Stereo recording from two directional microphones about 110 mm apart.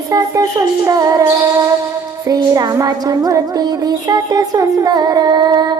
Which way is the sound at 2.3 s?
35° right (ahead or behind).